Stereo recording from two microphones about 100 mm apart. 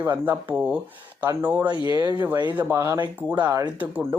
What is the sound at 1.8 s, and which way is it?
Speech, 45° right (ahead or behind).